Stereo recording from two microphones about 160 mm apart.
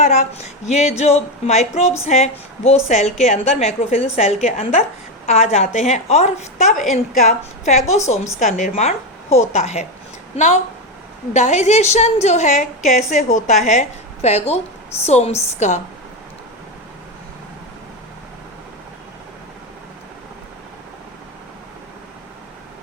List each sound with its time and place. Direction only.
0.0 s a woman's voice: 45° left (ahead or behind)